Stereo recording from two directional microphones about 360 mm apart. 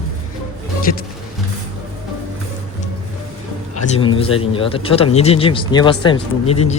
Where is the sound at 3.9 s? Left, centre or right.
Centre.